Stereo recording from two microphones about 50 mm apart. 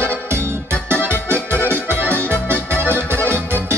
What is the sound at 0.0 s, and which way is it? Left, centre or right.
Organ, right.